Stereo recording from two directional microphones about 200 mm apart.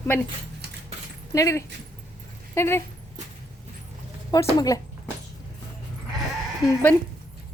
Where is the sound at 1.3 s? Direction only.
15° left (ahead or behind).